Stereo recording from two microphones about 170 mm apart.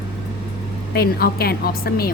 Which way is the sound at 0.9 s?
65° left (ahead or behind).